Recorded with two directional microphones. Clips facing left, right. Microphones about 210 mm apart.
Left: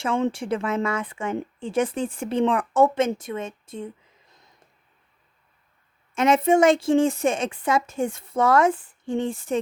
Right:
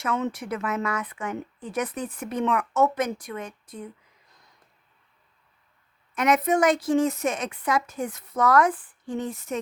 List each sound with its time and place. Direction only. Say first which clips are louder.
0.0 s a woman's voice: left 4 dB; 30° left (ahead or behind)
6.1 s a woman's voice: left 4 dB; 25° left (ahead or behind)